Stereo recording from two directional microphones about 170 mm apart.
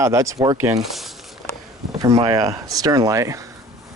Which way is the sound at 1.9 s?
20° right (ahead or behind).